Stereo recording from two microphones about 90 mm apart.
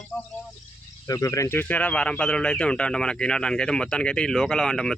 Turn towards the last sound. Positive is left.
turn(degrees=5)  # may be behind; listen again after turning